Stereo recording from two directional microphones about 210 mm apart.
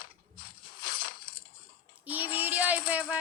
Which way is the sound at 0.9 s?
45° left (ahead or behind).